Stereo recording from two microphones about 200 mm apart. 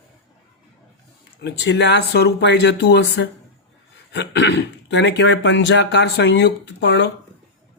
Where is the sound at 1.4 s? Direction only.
60° left (ahead or behind).